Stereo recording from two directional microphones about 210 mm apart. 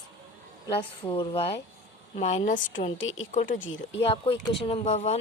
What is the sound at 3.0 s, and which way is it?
Speech, 70° left (ahead or behind).